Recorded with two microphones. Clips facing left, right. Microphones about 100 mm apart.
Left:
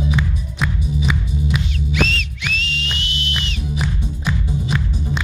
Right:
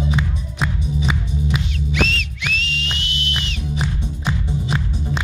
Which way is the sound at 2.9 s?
Centre (ahead or behind).